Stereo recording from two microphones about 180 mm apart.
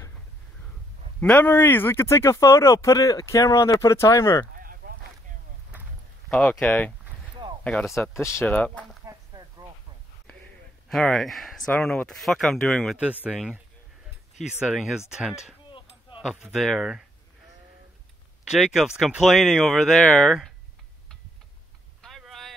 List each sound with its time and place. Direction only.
1.2 s speech: 10° left (ahead or behind)
4.6 s a sound: 50° right (ahead or behind)
6.3 s speech: 5° left (ahead or behind)
8.1 s speech: 15° left (ahead or behind)
9.0 s a sound: 20° right (ahead or behind)
10.9 s speech: centre (ahead or behind)
18.5 s speech: centre (ahead or behind)
22.0 s vehicle: centre (ahead or behind)